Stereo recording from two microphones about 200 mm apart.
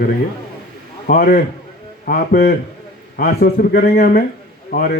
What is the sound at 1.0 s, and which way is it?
A man's voice, 45° left (ahead or behind).